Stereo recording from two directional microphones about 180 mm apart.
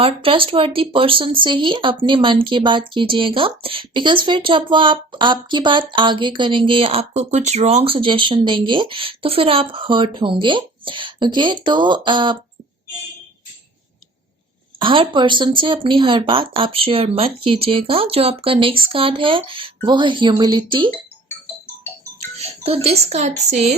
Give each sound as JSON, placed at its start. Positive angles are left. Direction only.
{"t": 0.0, "sound": "speech", "side_deg": -30}
{"t": 14.8, "sound": "speech", "side_deg": -30}
{"t": 22.4, "sound": "speech", "side_deg": -35}